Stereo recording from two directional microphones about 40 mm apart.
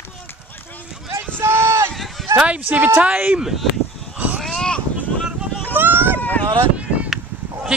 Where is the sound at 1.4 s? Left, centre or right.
Right.